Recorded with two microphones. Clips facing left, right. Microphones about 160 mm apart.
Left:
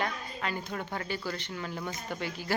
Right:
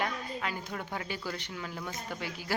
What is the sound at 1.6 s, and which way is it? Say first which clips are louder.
Speech: left 2 dB; 5° left (ahead or behind).